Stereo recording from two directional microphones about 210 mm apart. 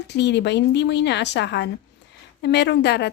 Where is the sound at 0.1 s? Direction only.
55° left (ahead or behind).